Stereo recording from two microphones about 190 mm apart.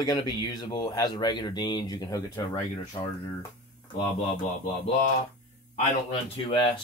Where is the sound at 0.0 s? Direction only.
20° left (ahead or behind).